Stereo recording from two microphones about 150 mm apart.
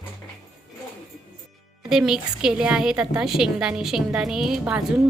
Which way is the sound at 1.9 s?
5° right (ahead or behind).